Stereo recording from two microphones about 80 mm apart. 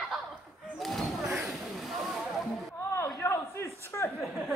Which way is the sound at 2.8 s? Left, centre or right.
Left.